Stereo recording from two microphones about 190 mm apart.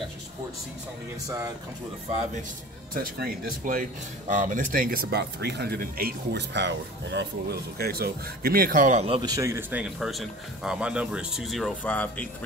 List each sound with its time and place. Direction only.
2.9 s speech: 45° right (ahead or behind)
9.1 s speech: 20° right (ahead or behind); by 12.3 s 5° left (ahead or behind)